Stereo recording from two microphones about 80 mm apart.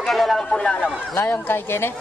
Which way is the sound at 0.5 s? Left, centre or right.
Centre.